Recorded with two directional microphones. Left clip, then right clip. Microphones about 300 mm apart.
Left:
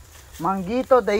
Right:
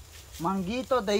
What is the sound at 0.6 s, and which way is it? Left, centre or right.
Speech, left.